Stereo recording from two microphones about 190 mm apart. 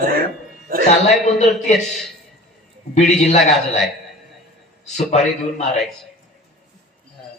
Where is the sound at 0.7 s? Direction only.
50° right (ahead or behind).